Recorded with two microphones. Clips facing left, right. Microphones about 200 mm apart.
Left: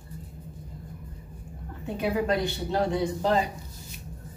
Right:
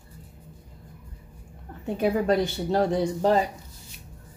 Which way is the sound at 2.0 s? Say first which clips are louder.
Right 3 dB; 45° right (ahead or behind).